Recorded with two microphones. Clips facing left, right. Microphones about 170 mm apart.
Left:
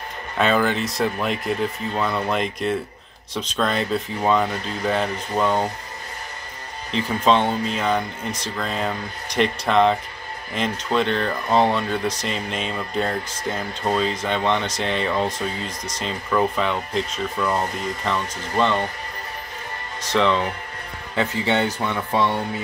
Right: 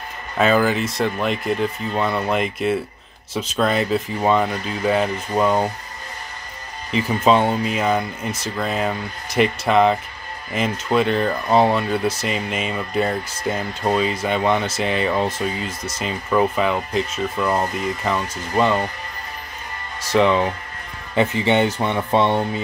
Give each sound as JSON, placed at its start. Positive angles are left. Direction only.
{"t": 0.4, "sound": "speech", "side_deg": -5}
{"t": 6.9, "sound": "speech", "side_deg": -5}
{"t": 20.0, "sound": "speech", "side_deg": -10}